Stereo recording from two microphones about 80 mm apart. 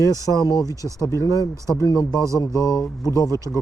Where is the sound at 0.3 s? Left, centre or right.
Left.